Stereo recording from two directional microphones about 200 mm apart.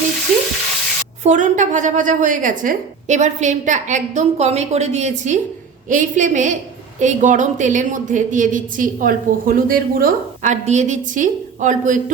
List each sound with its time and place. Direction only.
0.3 s stir: centre (ahead or behind)
1.2 s a woman's voice: 35° right (ahead or behind)